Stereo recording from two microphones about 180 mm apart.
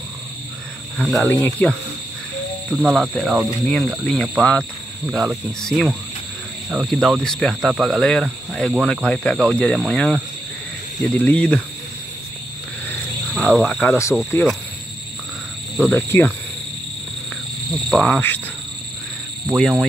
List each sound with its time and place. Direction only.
0.9 s speech: 5° left (ahead or behind)
2.9 s speech: centre (ahead or behind)
12.8 s cricket: 5° left (ahead or behind)
14.3 s speech: 5° left (ahead or behind)
15.9 s cricket: 10° left (ahead or behind)
17.8 s speech: 5° left (ahead or behind)
19.5 s speech: centre (ahead or behind)